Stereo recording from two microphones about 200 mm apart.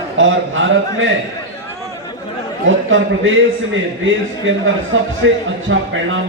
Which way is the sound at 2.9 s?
75° right (ahead or behind).